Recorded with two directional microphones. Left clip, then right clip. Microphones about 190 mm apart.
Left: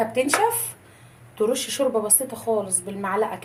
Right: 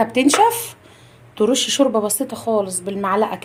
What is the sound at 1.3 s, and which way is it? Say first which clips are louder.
A woman's voice: right 6 dB; 55° right (ahead or behind).